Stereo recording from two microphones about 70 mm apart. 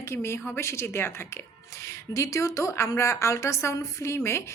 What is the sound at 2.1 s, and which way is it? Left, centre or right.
A woman's voice, left.